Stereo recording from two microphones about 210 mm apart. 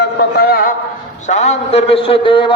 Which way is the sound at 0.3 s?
45° left (ahead or behind).